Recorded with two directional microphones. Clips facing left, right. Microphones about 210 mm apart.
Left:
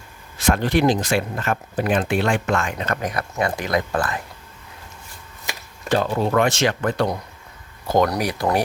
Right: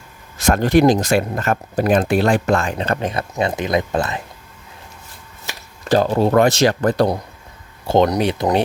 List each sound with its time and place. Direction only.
0.3 s speech: 45° right (ahead or behind); by 4.2 s 20° right (ahead or behind)
5.9 s speech: 35° right (ahead or behind)
7.9 s speech: 25° right (ahead or behind)